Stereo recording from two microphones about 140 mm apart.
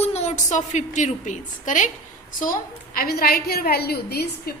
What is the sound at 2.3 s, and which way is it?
A woman's voice, 75° left (ahead or behind).